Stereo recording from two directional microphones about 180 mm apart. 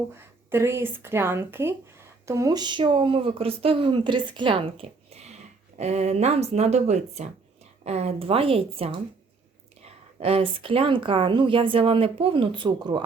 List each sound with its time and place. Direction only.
0.1 s a woman's voice: 15° right (ahead or behind)